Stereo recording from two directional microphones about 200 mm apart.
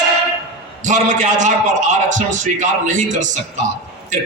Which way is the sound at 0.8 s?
40° right (ahead or behind).